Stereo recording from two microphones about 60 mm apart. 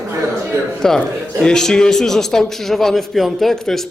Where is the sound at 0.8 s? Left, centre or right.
Centre.